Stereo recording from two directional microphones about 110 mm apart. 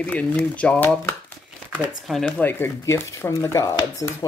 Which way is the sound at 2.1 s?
5° left (ahead or behind).